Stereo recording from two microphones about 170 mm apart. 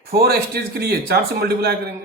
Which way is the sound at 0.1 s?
65° right (ahead or behind).